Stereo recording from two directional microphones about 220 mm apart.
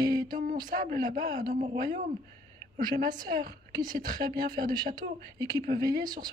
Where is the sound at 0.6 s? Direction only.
40° right (ahead or behind).